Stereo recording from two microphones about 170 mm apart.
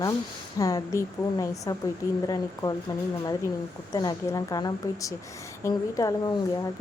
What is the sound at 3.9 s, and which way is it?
Speech, 20° left (ahead or behind).